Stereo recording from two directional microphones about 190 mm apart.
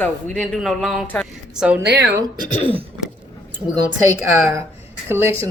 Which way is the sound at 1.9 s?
60° right (ahead or behind).